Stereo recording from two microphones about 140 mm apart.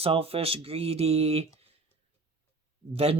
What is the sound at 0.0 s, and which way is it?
Speech, 45° right (ahead or behind).